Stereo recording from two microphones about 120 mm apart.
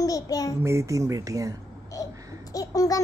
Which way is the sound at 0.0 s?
30° left (ahead or behind).